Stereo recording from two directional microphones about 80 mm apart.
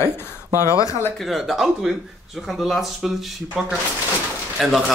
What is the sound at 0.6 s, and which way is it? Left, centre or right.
Speech, left.